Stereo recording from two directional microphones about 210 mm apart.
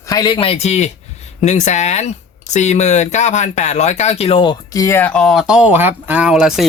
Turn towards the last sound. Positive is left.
turn(degrees=0)  # may be behind; listen again after turning